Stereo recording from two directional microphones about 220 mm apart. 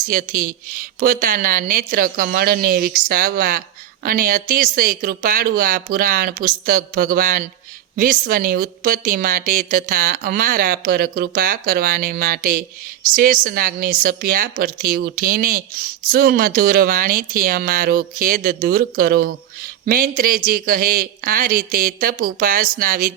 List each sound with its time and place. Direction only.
0.1 s a woman's voice: 40° right (ahead or behind)